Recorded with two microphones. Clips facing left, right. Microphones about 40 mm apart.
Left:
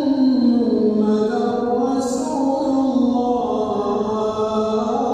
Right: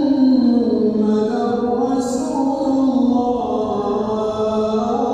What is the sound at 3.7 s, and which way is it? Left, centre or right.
Mantra, centre.